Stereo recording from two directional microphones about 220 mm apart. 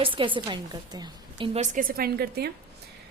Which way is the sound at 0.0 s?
25° right (ahead or behind).